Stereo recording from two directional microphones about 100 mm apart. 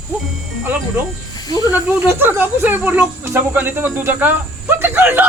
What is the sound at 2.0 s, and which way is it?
Speech, 20° right (ahead or behind).